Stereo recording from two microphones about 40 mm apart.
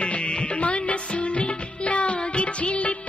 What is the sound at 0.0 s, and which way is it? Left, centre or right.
Music, left.